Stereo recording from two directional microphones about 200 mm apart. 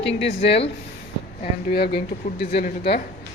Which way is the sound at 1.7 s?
50° left (ahead or behind).